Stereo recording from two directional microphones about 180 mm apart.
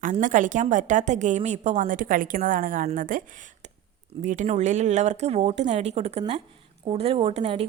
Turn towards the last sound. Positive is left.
turn(degrees=-35)  # may be behind; listen again after turning